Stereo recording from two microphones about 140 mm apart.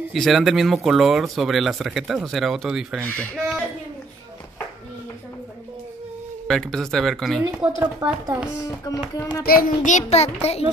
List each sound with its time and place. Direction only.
0.1 s speech: centre (ahead or behind)
6.4 s speech: 5° left (ahead or behind)
8.0 s a child's voice: 30° right (ahead or behind)
8.9 s speech: 25° left (ahead or behind)
9.4 s a child's voice: 90° left; by 10.6 s 50° left (ahead or behind)